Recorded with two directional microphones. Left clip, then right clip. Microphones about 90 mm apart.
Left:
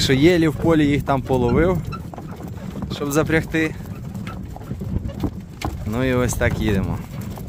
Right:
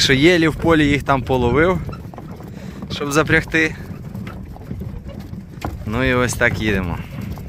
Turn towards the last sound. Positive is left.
turn(degrees=15)  # may be behind; listen again after turning